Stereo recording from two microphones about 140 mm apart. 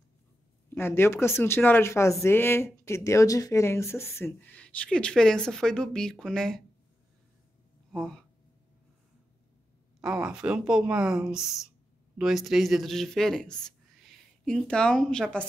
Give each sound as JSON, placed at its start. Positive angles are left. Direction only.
{"t": 0.7, "sound": "speech", "side_deg": 15}
{"t": 7.9, "sound": "speech", "side_deg": 5}
{"t": 10.0, "sound": "speech", "side_deg": -5}